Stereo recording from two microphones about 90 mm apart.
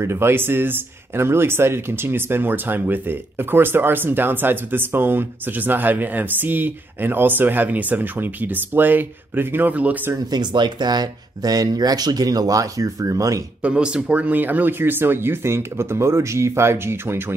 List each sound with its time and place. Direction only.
0.0 s speech: 30° right (ahead or behind)
10.1 s speech: 50° right (ahead or behind)
13.6 s speech: 10° right (ahead or behind)